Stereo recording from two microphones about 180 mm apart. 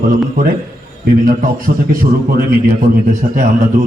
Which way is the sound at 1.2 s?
50° right (ahead or behind).